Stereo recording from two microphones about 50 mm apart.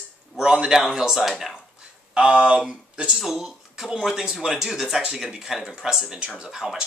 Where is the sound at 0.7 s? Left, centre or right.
Centre.